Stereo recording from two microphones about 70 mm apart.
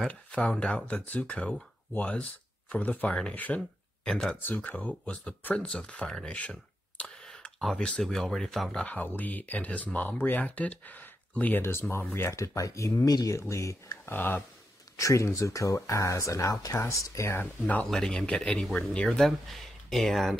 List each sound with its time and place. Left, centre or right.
0.1 s speech: centre
4.1 s speech: centre
4.4 s speech: left; by 8.8 s centre
8.8 s speech: left
11.9 s speech: left
12.4 s speech: left
12.9 s speech: left
13.4 s speech: left
14.0 s speech: left
15.0 s speech: left
17.4 s speech: left
17.8 s speech: centre